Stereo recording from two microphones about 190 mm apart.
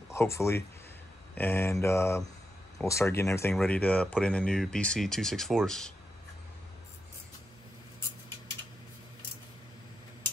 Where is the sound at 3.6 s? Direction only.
5° left (ahead or behind).